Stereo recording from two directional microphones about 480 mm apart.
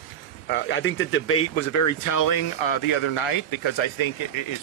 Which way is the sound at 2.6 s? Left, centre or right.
Left.